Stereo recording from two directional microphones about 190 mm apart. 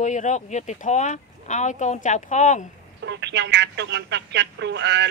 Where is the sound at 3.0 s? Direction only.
65° right (ahead or behind).